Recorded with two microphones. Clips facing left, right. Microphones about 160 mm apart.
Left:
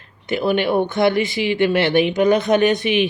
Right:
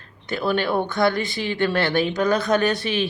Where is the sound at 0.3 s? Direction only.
15° left (ahead or behind).